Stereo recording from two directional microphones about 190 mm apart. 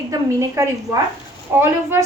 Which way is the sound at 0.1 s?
15° right (ahead or behind).